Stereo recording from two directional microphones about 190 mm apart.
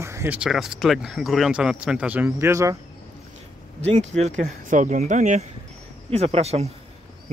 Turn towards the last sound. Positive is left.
turn(degrees=-35)  # may be behind; listen again after turning